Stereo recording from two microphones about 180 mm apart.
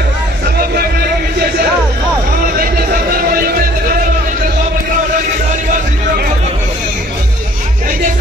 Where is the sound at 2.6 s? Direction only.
55° right (ahead or behind).